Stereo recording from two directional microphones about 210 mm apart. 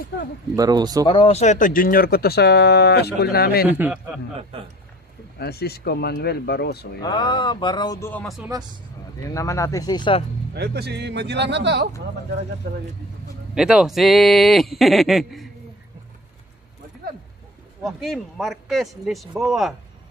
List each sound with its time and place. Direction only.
0.6 s a man's voice: 20° right (ahead or behind)
1.0 s speech: 25° left (ahead or behind); by 3.6 s 45° left (ahead or behind)
3.6 s a man's voice: 10° right (ahead or behind)
5.4 s speech: 50° left (ahead or behind)
7.0 s speech: 20° left (ahead or behind)
10.5 s speech: 50° right (ahead or behind)
13.6 s speech: 5° right (ahead or behind)
17.8 s speech: centre (ahead or behind)